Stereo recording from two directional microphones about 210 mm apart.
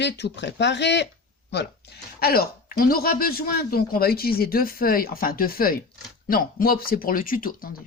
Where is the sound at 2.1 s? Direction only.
45° left (ahead or behind).